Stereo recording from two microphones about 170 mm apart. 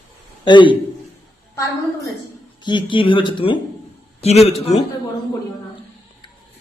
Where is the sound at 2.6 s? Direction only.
25° left (ahead or behind).